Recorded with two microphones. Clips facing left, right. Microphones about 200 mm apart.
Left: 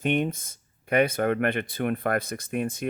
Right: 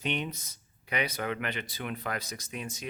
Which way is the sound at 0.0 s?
50° left (ahead or behind).